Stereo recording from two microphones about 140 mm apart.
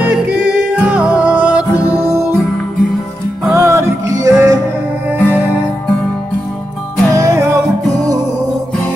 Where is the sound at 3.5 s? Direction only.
20° right (ahead or behind).